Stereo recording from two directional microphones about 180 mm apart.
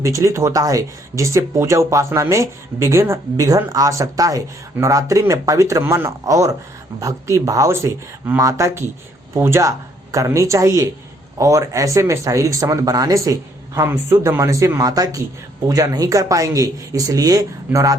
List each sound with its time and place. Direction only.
0.0 s speech: 15° right (ahead or behind)